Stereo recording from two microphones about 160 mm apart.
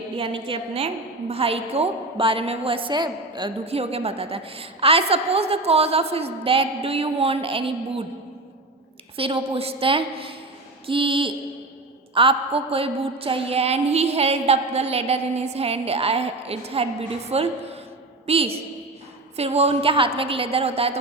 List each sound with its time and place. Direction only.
0.2 s a woman's voice: 35° right (ahead or behind)
9.1 s a woman's voice: 35° right (ahead or behind)